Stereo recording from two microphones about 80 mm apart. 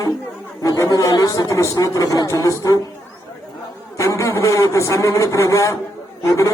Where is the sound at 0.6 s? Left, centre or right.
Left.